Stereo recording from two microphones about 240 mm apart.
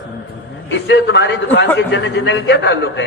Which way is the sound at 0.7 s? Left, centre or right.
Left.